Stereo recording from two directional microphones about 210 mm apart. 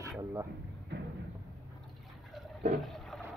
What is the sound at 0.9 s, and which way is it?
Thump, 55° right (ahead or behind).